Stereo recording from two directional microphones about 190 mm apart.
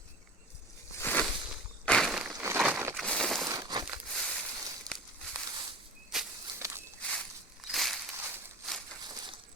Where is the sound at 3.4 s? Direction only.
20° right (ahead or behind).